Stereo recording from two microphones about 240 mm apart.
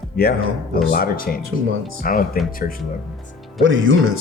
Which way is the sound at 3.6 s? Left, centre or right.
Right.